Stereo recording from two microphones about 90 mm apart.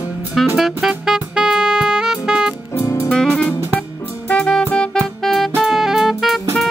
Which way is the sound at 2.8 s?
35° left (ahead or behind).